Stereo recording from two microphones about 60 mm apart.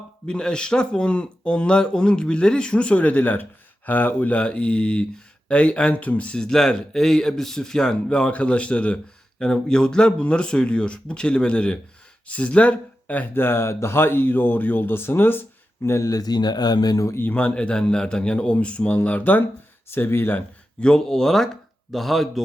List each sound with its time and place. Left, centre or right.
0.3 s a man's voice: centre
13.3 s speech: left
15.8 s speech: left
17.2 s speech: left
17.4 s a man's voice: centre
19.9 s speech: left
20.8 s speech: centre